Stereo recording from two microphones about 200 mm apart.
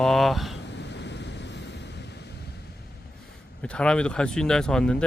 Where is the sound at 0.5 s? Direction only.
60° left (ahead or behind).